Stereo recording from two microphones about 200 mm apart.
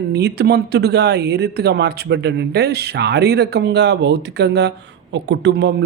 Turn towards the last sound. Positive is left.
turn(degrees=-60)  # may be behind; listen again after turning